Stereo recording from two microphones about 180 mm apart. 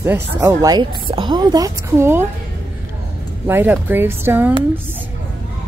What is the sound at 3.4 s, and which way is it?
Speech, 10° right (ahead or behind).